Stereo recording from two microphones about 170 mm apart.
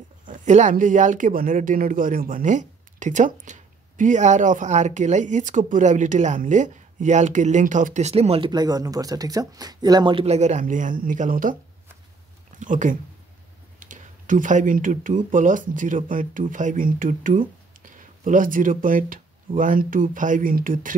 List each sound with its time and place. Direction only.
0.2 s speech: 45° right (ahead or behind)
12.5 s speech: 50° right (ahead or behind)